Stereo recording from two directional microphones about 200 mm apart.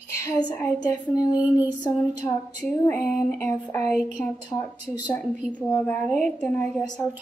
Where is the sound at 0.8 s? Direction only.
20° left (ahead or behind).